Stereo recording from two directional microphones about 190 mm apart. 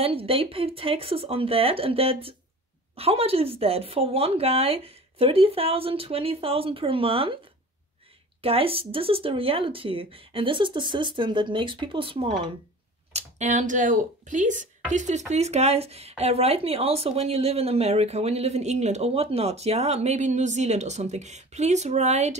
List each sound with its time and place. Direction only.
0.0 s speech: 30° right (ahead or behind)
8.4 s speech: 30° right (ahead or behind)
13.1 s speech: 40° right (ahead or behind)